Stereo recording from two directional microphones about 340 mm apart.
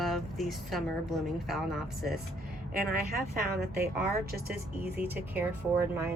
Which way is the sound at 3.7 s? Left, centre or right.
Right.